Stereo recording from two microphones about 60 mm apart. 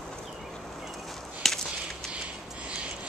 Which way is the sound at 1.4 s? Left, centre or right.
Centre.